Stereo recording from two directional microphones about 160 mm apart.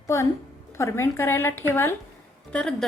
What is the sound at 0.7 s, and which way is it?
A woman's voice, 15° left (ahead or behind).